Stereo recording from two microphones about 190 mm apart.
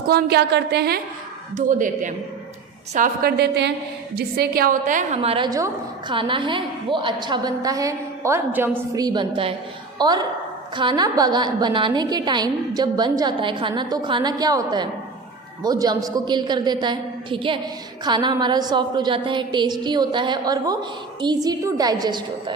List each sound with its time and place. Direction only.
0.1 s speech: 55° right (ahead or behind)
1.5 s a woman's voice: 45° right (ahead or behind)
5.5 s a woman's voice: 15° right (ahead or behind)